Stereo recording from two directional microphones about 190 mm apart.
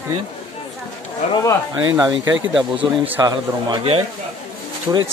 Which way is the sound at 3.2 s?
25° right (ahead or behind).